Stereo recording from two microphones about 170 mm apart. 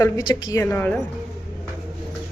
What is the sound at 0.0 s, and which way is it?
A woman's voice, 20° left (ahead or behind).